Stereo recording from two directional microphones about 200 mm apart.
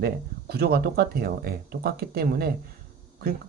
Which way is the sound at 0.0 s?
50° right (ahead or behind).